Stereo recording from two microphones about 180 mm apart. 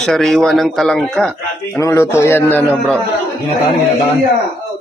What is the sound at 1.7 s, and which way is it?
A man's voice, 15° left (ahead or behind).